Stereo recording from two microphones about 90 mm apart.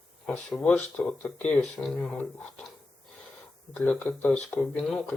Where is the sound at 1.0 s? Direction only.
15° left (ahead or behind).